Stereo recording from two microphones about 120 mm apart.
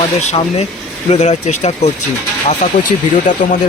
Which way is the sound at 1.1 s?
70° left (ahead or behind).